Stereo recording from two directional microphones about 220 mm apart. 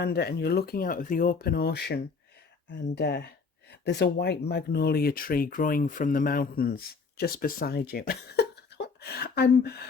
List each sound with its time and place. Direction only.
0.0 s speech: 45° left (ahead or behind)